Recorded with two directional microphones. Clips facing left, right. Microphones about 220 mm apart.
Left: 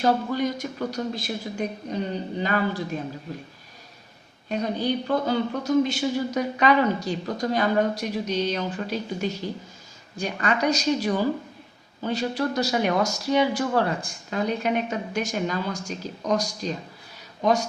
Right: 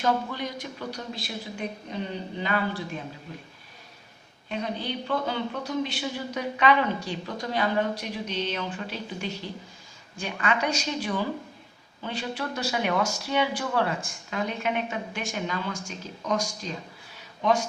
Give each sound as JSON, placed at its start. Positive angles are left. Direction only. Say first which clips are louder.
{"t": 0.0, "sound": "speech", "louder": "left 5 dB", "side_deg": 45}
{"t": 4.4, "sound": "speech", "louder": "left 6 dB", "side_deg": 40}